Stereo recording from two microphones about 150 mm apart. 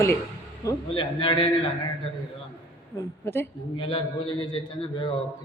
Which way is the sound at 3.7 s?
35° left (ahead or behind).